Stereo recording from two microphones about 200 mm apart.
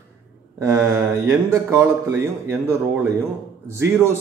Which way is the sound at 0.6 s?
15° right (ahead or behind).